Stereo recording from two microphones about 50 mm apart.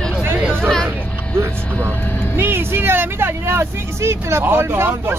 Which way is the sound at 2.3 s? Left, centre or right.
Right.